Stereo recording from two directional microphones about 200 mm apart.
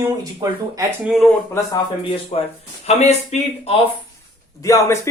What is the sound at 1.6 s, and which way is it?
Speech, 15° left (ahead or behind).